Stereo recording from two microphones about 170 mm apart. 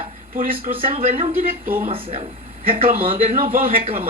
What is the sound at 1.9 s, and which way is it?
Speech, 35° right (ahead or behind).